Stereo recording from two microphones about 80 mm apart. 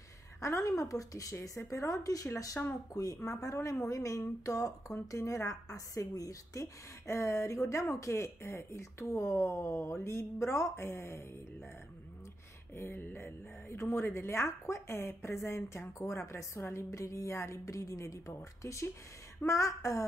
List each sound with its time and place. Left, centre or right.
0.4 s speech: left
12.7 s speech: left